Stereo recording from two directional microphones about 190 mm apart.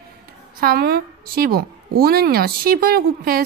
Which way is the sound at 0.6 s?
50° right (ahead or behind).